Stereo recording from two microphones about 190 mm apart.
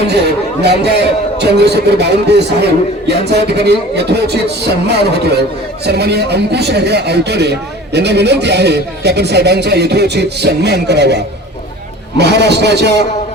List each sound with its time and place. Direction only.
0.1 s a man's voice: 60° right (ahead or behind)